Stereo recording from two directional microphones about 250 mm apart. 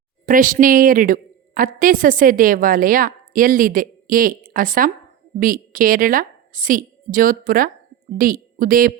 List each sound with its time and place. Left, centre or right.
0.3 s a woman's voice: right